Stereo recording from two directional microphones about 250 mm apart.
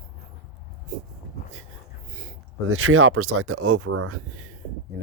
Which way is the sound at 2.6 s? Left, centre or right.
Right.